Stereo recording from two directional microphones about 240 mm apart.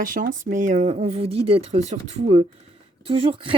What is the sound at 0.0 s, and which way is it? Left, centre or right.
Speech, right.